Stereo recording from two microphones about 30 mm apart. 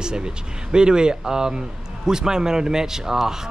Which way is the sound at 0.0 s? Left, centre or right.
Right.